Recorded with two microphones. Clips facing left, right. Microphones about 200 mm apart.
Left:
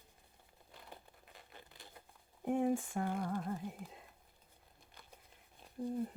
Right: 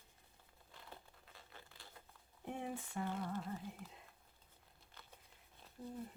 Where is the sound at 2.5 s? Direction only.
50° left (ahead or behind).